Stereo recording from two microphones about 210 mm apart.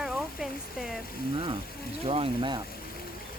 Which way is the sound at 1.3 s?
25° right (ahead or behind).